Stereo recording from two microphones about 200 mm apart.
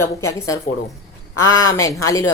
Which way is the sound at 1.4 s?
90° left.